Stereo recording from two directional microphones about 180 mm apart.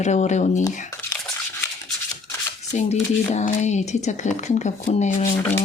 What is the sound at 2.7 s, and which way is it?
Speech, 40° left (ahead or behind).